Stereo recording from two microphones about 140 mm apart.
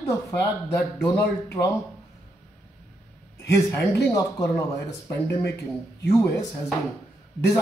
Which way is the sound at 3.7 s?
20° left (ahead or behind).